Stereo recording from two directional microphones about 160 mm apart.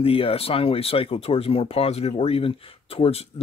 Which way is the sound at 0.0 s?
35° left (ahead or behind).